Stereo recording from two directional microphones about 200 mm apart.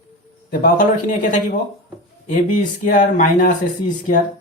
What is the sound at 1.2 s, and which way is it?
Speech, 40° left (ahead or behind).